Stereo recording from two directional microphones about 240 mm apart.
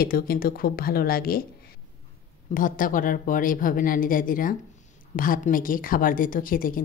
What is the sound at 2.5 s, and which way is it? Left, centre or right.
A woman's voice, left.